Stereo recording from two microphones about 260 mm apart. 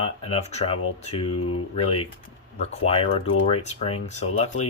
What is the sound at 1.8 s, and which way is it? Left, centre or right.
Speech, left.